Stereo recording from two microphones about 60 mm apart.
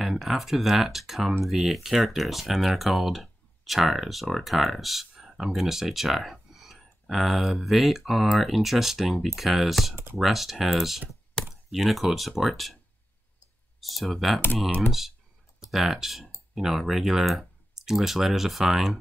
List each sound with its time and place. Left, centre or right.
0.0 s speech: centre
11.4 s a sound: centre
11.7 s speech: centre
13.7 s speech: centre